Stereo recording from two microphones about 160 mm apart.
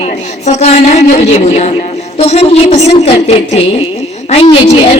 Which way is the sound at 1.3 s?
45° left (ahead or behind).